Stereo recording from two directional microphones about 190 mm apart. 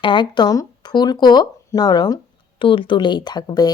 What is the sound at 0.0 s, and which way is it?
A woman's voice, 25° left (ahead or behind).